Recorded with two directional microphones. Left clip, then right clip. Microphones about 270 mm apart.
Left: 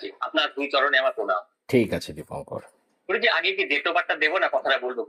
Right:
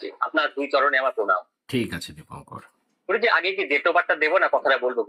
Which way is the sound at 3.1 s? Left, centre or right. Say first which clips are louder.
Right 1 dB; centre.